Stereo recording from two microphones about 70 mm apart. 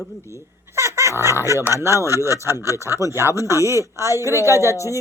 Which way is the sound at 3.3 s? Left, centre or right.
Right.